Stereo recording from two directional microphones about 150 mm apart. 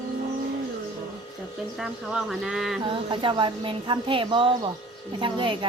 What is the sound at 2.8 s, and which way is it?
A woman's voice, 35° right (ahead or behind).